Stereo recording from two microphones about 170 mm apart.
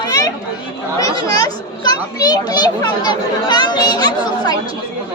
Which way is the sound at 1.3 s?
20° left (ahead or behind).